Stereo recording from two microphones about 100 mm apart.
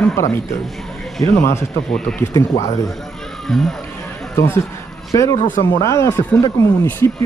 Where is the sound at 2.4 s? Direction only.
35° left (ahead or behind).